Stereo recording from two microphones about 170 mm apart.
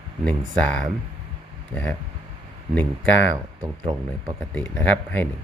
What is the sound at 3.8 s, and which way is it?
Speech, 25° right (ahead or behind).